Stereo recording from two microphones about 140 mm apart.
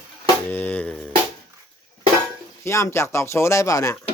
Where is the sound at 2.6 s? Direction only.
20° left (ahead or behind).